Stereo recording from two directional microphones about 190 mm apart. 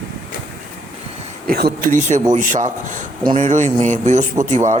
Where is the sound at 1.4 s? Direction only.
55° right (ahead or behind).